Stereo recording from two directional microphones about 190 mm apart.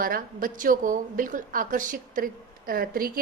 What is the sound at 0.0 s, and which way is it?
A woman's voice, 50° right (ahead or behind).